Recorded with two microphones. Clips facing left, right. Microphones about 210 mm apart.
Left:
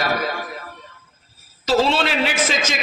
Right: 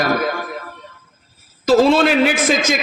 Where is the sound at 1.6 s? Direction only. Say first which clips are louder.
Right 6 dB; 45° right (ahead or behind).